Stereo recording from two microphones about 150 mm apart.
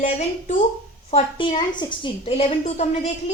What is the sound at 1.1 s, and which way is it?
A woman's voice, 35° left (ahead or behind).